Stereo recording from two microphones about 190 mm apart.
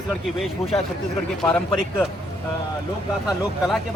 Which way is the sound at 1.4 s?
5° left (ahead or behind).